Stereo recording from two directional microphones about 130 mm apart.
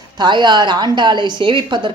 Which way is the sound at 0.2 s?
35° right (ahead or behind).